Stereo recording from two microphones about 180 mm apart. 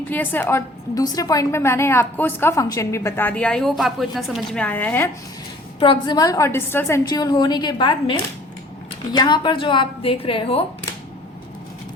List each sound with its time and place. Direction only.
0.1 s a woman's voice: 10° left (ahead or behind)
5.8 s a woman's voice: 25° left (ahead or behind)
9.1 s a woman's voice: 25° left (ahead or behind)